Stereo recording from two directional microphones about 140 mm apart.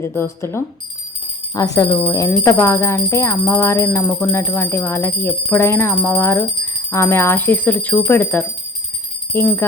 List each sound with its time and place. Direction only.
0.1 s speech: 15° left (ahead or behind)